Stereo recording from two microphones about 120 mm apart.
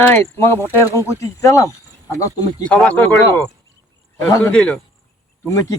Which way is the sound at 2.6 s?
10° left (ahead or behind).